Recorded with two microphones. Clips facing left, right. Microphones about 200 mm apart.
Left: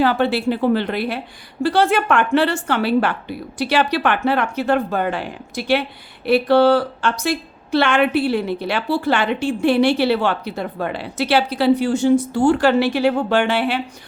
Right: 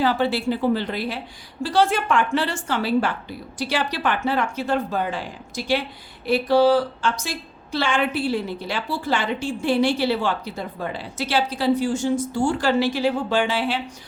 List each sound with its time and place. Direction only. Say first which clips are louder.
0.0 s a woman's voice: left 4 dB; 60° left (ahead or behind)